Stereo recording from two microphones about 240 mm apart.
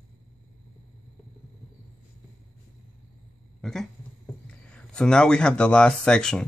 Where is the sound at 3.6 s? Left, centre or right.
Centre.